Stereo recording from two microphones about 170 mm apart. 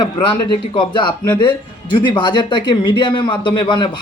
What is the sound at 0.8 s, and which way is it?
A man's voice, 30° left (ahead or behind).